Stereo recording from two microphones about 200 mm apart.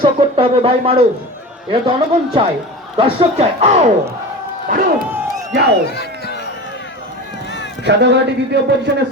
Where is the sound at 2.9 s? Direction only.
30° right (ahead or behind).